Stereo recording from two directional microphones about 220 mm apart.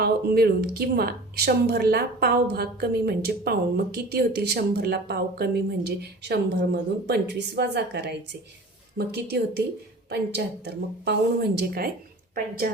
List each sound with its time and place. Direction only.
0.0 s speech: 45° right (ahead or behind)